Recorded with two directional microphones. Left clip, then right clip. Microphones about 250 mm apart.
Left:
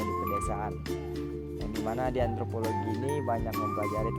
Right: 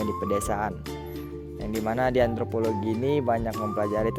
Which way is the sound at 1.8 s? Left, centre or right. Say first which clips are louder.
Right 7 dB; right.